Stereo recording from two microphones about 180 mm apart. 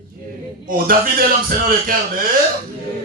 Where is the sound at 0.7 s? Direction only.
55° right (ahead or behind).